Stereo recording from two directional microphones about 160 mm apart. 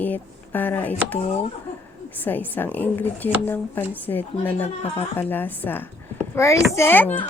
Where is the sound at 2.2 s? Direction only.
10° left (ahead or behind).